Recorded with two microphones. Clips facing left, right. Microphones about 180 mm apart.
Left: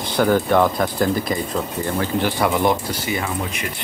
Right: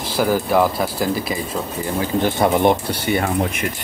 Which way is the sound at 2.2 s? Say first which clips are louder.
Right 4 dB; 25° right (ahead or behind).